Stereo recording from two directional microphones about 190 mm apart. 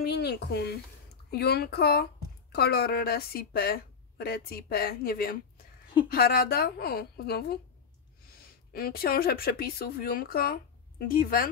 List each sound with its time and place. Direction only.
0.0 s speech: 60° left (ahead or behind)
8.7 s speech: 50° left (ahead or behind)